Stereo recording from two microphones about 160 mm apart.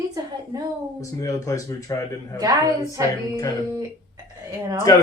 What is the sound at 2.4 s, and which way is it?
Speech, 20° right (ahead or behind).